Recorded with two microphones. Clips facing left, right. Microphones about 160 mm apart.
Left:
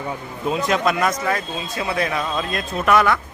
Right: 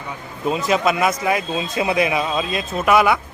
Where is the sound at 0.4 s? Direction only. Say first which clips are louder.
Right 1 dB; centre (ahead or behind).